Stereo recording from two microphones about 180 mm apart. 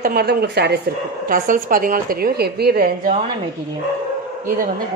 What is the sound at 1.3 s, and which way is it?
A woman's voice, 50° right (ahead or behind).